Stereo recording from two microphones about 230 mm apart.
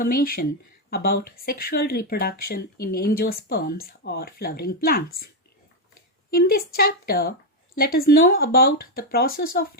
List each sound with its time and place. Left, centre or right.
0.0 s speech: left
6.3 s speech: left